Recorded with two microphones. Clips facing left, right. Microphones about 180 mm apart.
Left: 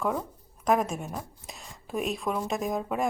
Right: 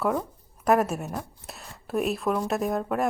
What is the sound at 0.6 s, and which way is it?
A woman's voice, 5° right (ahead or behind).